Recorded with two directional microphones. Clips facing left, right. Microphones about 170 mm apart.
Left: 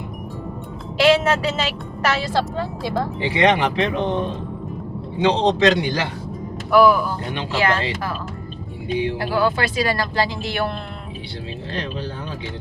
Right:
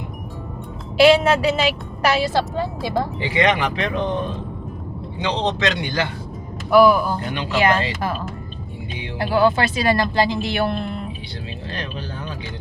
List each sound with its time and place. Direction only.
0.9 s speech: 10° right (ahead or behind)
3.2 s speech: 30° left (ahead or behind)
5.2 s a man's voice: 30° left (ahead or behind)
6.7 s speech: 15° right (ahead or behind)
9.1 s speech: 20° right (ahead or behind)
11.7 s speech: 25° left (ahead or behind)